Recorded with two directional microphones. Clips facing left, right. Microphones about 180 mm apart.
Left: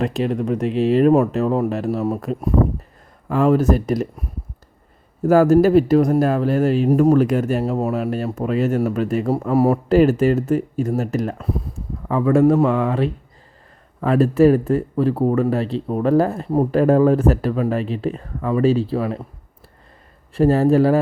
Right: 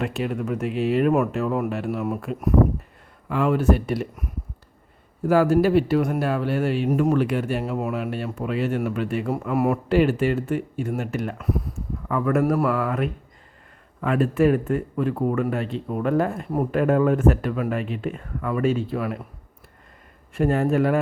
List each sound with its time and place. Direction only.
0.0 s speech: 35° left (ahead or behind)
20.3 s speech: 35° left (ahead or behind)